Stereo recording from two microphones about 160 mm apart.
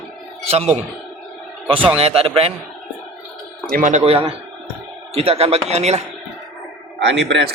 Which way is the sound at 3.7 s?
55° right (ahead or behind).